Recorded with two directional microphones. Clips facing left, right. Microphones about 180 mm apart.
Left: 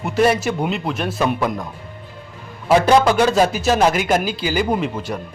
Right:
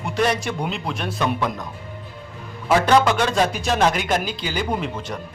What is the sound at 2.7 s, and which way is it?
Speech, 10° left (ahead or behind).